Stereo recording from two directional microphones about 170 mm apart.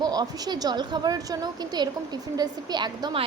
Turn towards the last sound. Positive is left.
turn(degrees=-25)  # may be behind; listen again after turning